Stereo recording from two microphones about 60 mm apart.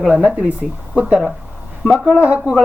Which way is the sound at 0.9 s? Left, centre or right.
Right.